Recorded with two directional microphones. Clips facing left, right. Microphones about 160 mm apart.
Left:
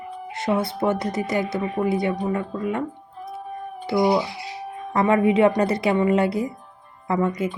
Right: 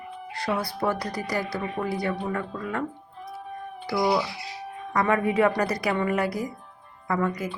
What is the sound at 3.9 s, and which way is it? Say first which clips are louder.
Speech: left 4 dB; 25° left (ahead or behind).